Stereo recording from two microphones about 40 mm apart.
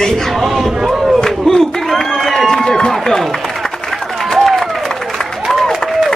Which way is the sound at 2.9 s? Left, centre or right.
Centre.